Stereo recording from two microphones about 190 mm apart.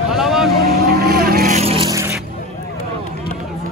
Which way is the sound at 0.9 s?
50° right (ahead or behind).